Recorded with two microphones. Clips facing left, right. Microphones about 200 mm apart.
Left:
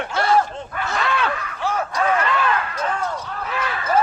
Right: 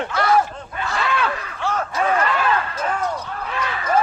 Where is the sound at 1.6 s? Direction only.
10° left (ahead or behind).